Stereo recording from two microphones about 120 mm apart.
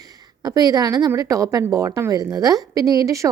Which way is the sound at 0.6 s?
35° right (ahead or behind).